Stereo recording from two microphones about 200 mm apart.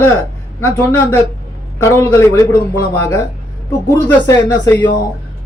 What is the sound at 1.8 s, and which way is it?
Speech, 15° left (ahead or behind).